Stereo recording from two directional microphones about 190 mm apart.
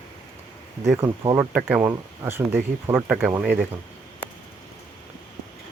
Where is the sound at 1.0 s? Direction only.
25° right (ahead or behind).